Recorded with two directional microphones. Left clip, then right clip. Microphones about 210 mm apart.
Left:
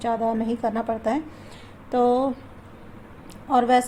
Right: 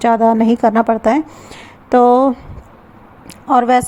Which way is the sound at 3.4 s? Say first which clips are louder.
Right 7 dB; 35° right (ahead or behind).